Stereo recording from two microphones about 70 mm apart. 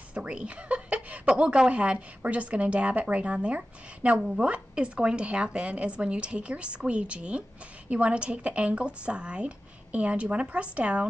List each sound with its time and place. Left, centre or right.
0.1 s a woman's voice: centre